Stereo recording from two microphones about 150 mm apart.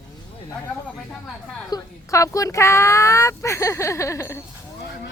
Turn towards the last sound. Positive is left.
turn(degrees=20)  # may be behind; listen again after turning